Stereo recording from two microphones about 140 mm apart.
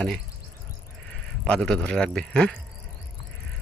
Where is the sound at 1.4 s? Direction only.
5° left (ahead or behind).